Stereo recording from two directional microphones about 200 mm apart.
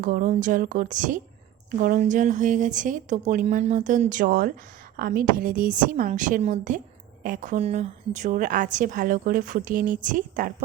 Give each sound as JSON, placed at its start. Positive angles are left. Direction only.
{"t": 0.0, "sound": "a woman's voice", "side_deg": -40}